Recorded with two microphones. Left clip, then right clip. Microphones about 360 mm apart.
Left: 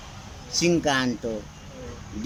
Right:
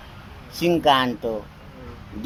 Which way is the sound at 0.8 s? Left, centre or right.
Right.